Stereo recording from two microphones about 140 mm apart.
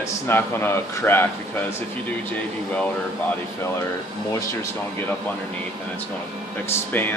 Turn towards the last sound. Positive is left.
turn(degrees=15)  # may be behind; listen again after turning